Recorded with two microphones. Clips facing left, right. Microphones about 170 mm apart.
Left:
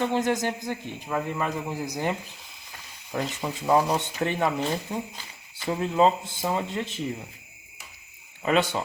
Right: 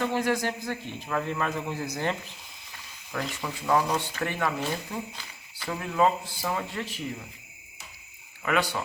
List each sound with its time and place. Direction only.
0.0 s a man's voice: 20° left (ahead or behind)
8.4 s speech: 25° left (ahead or behind)